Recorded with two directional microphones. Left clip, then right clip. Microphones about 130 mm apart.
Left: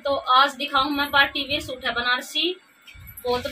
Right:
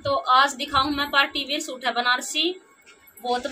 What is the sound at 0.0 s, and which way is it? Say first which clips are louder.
A woman's voice: even; 10° right (ahead or behind).